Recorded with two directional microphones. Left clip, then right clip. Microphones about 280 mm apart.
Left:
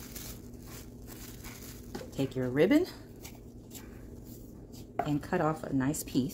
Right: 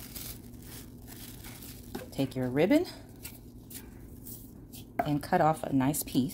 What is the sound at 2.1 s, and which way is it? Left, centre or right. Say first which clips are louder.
Speech: even; centre.